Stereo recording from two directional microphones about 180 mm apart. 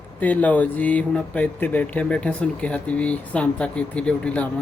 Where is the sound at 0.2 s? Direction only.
10° left (ahead or behind).